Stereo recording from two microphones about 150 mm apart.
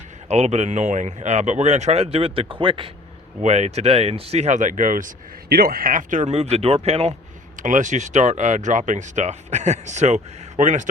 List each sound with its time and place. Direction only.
0.3 s speech: 45° right (ahead or behind)
3.4 s speech: 45° right (ahead or behind)
7.6 s speech: 55° right (ahead or behind)